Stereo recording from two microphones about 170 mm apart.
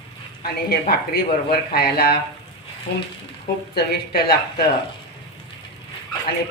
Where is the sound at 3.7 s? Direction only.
70° left (ahead or behind).